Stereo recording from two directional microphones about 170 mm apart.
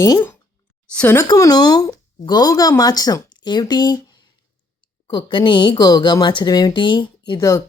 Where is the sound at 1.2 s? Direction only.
20° left (ahead or behind).